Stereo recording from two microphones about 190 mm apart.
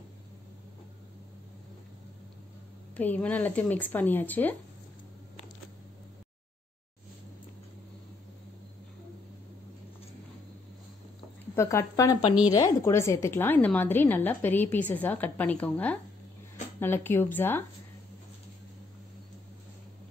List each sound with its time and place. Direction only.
3.0 s speech: 10° left (ahead or behind)
11.5 s speech: 15° left (ahead or behind)